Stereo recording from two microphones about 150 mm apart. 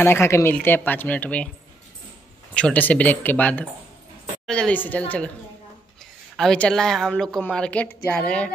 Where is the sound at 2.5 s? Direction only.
10° left (ahead or behind).